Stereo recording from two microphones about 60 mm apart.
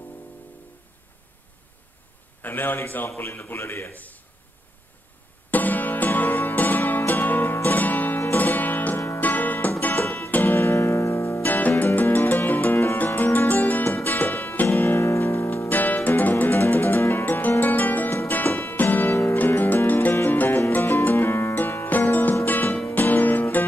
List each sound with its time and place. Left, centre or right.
2.4 s speech: left
3.9 s a man's voice: left
5.5 s music: left
8.9 s music: left
9.2 s music: left
10.6 s music: left
11.4 s music: left
15.0 s music: left
19.0 s music: left
19.3 s music: left
21.8 s music: left